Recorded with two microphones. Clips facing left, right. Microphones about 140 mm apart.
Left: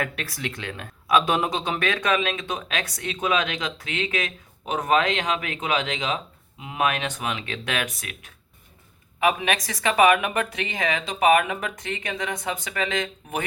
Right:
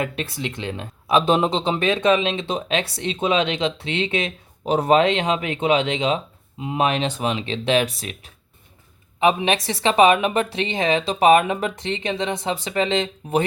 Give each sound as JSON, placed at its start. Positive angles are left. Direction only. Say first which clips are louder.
{"t": 0.0, "sound": "speech", "louder": "right 4 dB", "side_deg": -25}